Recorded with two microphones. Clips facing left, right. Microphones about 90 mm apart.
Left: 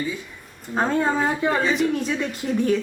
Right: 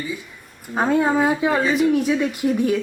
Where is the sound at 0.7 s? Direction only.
5° right (ahead or behind).